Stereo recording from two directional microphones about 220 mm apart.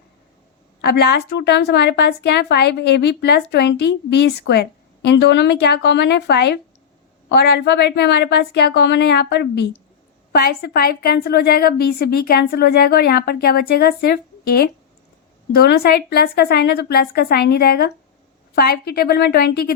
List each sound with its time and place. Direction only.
0.8 s a woman's voice: 45° left (ahead or behind)